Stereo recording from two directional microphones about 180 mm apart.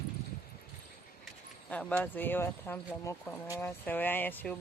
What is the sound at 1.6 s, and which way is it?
Speech, 10° left (ahead or behind).